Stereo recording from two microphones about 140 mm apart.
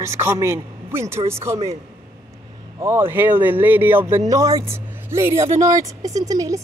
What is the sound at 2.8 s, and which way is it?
Speech, 15° right (ahead or behind).